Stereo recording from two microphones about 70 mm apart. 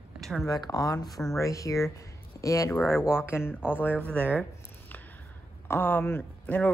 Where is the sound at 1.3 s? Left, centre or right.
Left.